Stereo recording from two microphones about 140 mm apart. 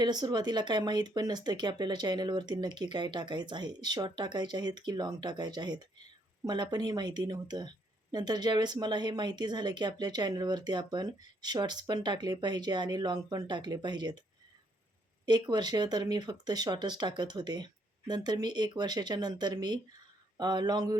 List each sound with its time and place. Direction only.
0.0 s speech: 30° right (ahead or behind)
15.3 s speech: 30° right (ahead or behind)